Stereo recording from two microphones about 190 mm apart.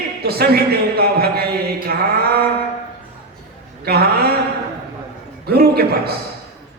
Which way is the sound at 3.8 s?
55° right (ahead or behind).